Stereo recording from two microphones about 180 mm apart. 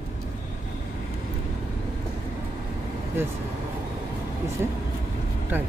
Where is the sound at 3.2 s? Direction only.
15° right (ahead or behind).